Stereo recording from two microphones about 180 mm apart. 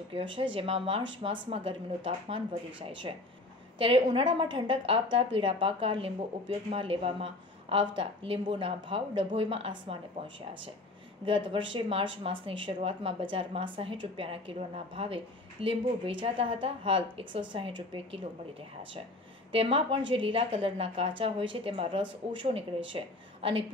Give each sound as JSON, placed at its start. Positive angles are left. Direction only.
{"t": 0.1, "sound": "a woman's voice", "side_deg": -30}
{"t": 19.5, "sound": "a woman's voice", "side_deg": -30}